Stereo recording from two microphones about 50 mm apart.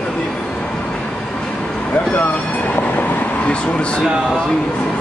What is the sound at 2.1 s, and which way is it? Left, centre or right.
Train, left.